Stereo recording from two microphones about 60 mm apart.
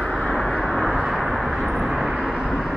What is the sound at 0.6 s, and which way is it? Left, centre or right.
Vehicle, centre.